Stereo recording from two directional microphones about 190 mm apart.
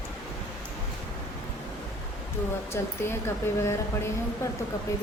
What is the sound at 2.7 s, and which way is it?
Speech, 10° left (ahead or behind).